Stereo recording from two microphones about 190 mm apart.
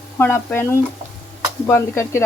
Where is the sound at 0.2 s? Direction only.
10° left (ahead or behind).